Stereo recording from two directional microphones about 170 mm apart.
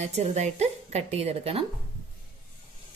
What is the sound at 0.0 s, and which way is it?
A woman's voice, 40° right (ahead or behind).